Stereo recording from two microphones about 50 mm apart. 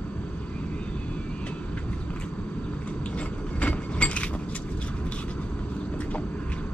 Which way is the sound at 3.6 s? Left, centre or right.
Left.